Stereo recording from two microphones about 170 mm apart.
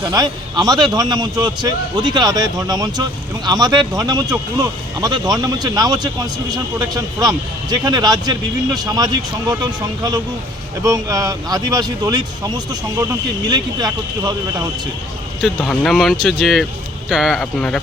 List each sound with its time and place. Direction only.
0.0 s speech: 20° right (ahead or behind)
15.4 s speech: 5° left (ahead or behind)